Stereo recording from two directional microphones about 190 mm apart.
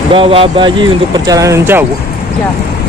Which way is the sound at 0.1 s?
30° right (ahead or behind).